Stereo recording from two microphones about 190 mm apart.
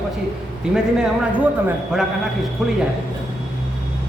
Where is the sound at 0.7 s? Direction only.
5° right (ahead or behind).